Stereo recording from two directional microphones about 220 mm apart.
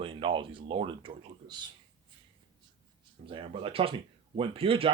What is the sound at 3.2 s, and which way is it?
Speech, 25° right (ahead or behind).